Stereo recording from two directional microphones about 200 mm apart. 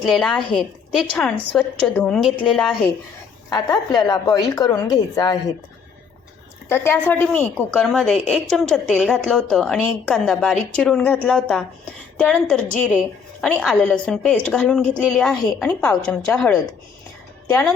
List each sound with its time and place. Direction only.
0.0 s a woman's voice: centre (ahead or behind)
3.5 s speech: 20° left (ahead or behind)
6.7 s a woman's voice: 10° left (ahead or behind)